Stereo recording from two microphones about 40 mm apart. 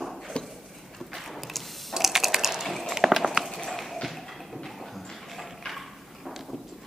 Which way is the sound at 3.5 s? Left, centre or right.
Centre.